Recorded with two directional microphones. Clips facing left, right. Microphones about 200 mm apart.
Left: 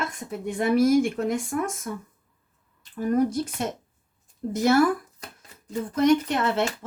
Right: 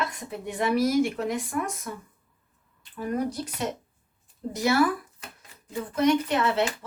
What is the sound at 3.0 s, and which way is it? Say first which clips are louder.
Speech: left 6 dB; 50° left (ahead or behind).